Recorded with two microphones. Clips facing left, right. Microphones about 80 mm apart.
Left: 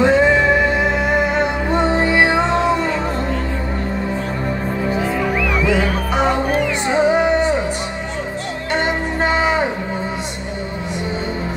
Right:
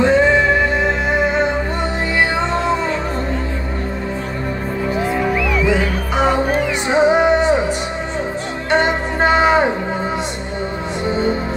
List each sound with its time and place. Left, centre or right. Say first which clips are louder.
0.0 s music: even; centre
2.1 s music: left 2 dB; centre
6.9 s music: right 2 dB; centre
8.6 s music: right 4 dB; right